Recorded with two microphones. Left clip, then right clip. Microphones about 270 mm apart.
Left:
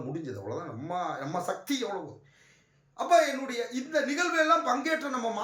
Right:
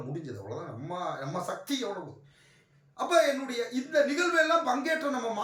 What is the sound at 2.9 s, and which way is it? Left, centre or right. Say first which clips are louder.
Speech: left 1 dB; centre.